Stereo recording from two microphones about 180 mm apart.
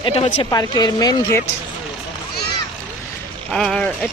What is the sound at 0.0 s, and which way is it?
Speech, 30° left (ahead or behind).